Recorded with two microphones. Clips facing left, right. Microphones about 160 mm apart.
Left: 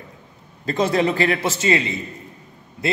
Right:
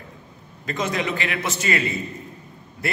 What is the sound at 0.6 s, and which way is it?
Speech, 35° left (ahead or behind).